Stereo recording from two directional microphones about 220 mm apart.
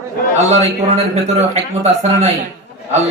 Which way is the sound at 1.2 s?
30° right (ahead or behind).